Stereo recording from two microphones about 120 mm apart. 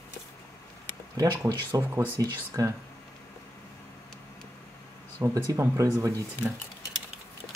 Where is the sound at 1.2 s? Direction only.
30° right (ahead or behind).